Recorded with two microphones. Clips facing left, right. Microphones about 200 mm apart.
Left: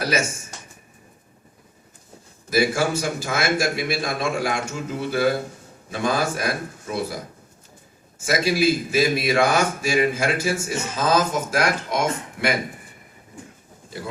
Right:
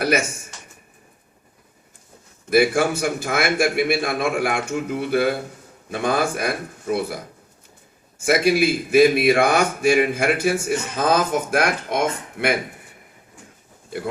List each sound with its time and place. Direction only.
2.5 s a man's voice: 60° right (ahead or behind)
8.2 s a man's voice: 60° right (ahead or behind)